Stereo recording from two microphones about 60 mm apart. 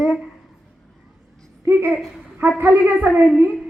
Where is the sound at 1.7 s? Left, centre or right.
Right.